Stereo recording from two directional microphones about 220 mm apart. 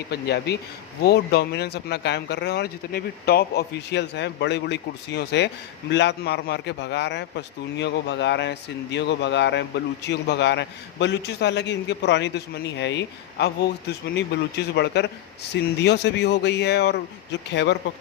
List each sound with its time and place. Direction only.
0.1 s a man's voice: 50° left (ahead or behind)